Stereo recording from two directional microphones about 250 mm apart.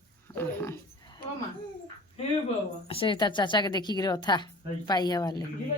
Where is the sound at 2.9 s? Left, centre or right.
Left.